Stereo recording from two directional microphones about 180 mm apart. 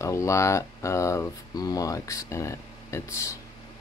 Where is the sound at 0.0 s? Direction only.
15° left (ahead or behind).